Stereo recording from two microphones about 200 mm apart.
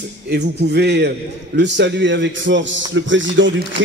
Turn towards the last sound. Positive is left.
turn(degrees=-70)  # may be behind; listen again after turning